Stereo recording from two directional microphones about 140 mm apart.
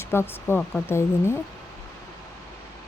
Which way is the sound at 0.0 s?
15° left (ahead or behind).